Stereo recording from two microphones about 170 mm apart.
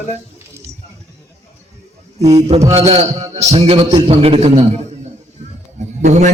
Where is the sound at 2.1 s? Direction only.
40° right (ahead or behind).